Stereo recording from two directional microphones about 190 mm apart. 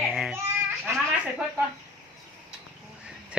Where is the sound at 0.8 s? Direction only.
5° right (ahead or behind).